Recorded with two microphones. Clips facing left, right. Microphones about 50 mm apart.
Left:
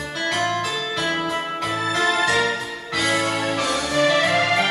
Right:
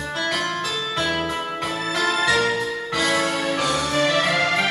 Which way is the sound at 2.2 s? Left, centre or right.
Left.